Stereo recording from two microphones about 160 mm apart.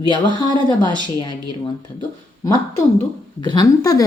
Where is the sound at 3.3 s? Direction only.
25° left (ahead or behind).